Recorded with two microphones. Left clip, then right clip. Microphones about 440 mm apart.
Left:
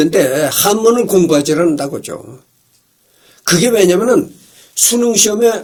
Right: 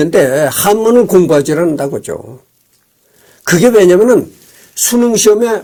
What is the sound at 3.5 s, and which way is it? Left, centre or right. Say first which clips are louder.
Speech: right 4 dB; right.